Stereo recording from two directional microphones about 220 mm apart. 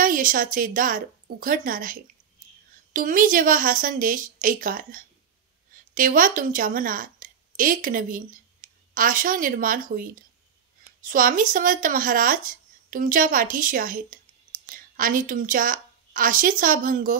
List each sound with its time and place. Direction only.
0.0 s a woman's voice: 40° right (ahead or behind)